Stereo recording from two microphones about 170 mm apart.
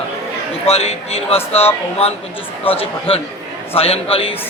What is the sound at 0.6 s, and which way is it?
A man's voice, 35° left (ahead or behind).